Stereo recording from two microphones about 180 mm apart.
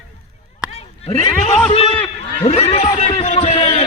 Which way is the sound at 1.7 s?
35° left (ahead or behind).